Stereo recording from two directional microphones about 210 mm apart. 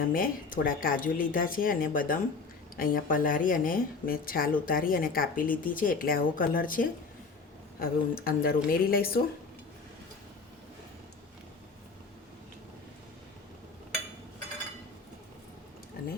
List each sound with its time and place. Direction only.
0.1 s a woman's voice: 40° left (ahead or behind)